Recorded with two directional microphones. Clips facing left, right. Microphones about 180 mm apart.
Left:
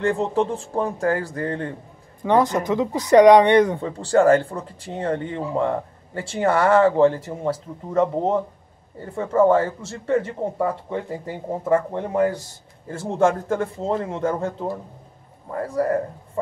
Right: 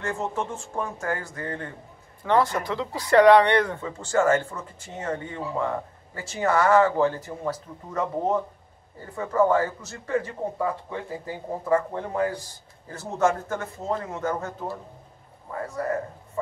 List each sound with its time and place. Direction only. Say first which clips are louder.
0.0 s speech: left 8 dB; 35° left (ahead or behind)
2.2 s speech: left 4 dB; 15° left (ahead or behind)
3.8 s speech: left 6 dB; 35° left (ahead or behind)
15.5 s speech: left 6 dB; 35° left (ahead or behind)